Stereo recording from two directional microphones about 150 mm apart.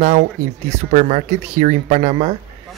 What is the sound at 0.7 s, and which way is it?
Speech, 50° right (ahead or behind).